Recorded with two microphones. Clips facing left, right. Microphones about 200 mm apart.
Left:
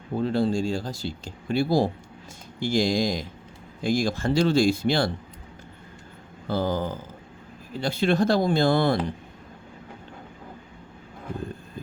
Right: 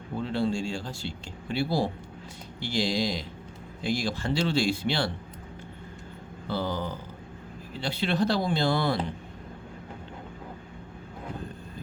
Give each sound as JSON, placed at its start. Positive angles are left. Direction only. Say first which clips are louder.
{"t": 0.2, "sound": "speech", "louder": "left 4 dB", "side_deg": 40}
{"t": 6.5, "sound": "speech", "louder": "left 5 dB", "side_deg": 45}